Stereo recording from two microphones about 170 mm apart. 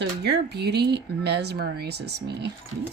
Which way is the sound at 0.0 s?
75° right (ahead or behind).